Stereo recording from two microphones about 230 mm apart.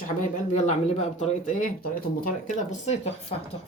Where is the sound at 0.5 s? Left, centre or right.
Left.